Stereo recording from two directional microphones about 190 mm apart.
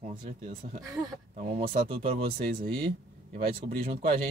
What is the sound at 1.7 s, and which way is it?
Speech, 30° right (ahead or behind).